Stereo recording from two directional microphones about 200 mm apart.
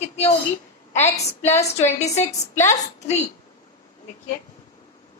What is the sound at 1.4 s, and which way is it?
A woman's voice, 35° left (ahead or behind).